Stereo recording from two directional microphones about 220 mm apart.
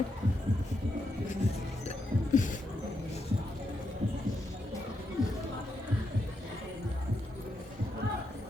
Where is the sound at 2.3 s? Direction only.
35° left (ahead or behind).